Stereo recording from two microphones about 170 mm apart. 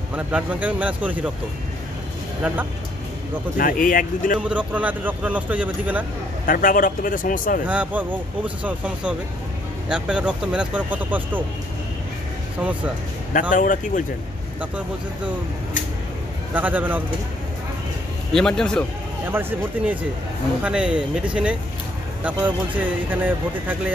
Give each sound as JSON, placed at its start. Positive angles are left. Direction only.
{"t": 0.1, "sound": "speech", "side_deg": -10}
{"t": 3.5, "sound": "speech", "side_deg": 55}
{"t": 4.5, "sound": "speech", "side_deg": -10}
{"t": 6.4, "sound": "speech", "side_deg": 55}
{"t": 7.6, "sound": "speech", "side_deg": -10}
{"t": 13.3, "sound": "speech", "side_deg": 50}
{"t": 16.5, "sound": "speech", "side_deg": -10}
{"t": 18.3, "sound": "a man's voice", "side_deg": 5}
{"t": 19.3, "sound": "speech", "side_deg": -10}